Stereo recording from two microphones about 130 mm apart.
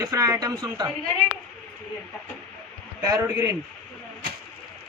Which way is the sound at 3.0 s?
30° right (ahead or behind).